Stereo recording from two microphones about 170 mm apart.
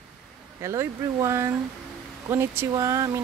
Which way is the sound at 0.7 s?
20° right (ahead or behind).